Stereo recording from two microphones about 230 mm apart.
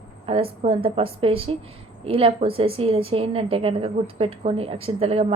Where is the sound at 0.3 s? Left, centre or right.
Right.